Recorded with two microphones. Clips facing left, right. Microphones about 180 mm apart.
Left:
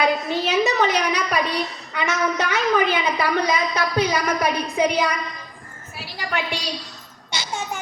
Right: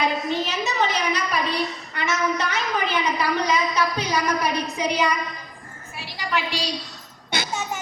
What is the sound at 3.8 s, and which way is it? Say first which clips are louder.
A woman's voice: left 2 dB; 60° left (ahead or behind).